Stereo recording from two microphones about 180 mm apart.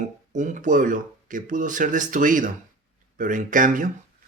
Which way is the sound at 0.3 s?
45° right (ahead or behind).